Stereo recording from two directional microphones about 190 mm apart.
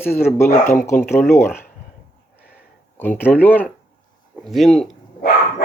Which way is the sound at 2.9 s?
10° left (ahead or behind).